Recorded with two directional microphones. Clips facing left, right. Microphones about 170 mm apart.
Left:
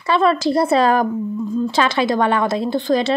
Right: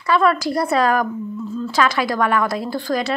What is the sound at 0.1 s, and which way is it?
Speech, 25° left (ahead or behind).